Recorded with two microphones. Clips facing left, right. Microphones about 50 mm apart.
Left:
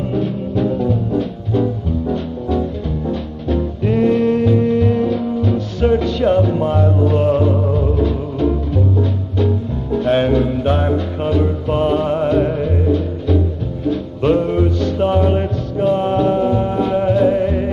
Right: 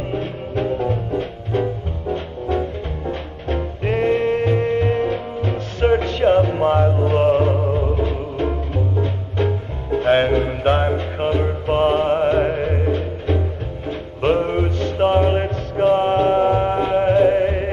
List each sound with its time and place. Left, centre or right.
0.1 s music: right
2.6 s music: right